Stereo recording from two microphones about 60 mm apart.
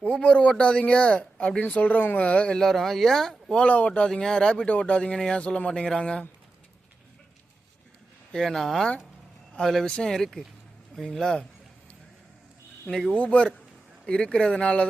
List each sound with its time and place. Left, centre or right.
0.2 s speech: centre
4.1 s speech: centre
4.5 s speech: left
5.1 s speech: centre
8.3 s speech: centre
12.9 s speech: centre
13.1 s speech: centre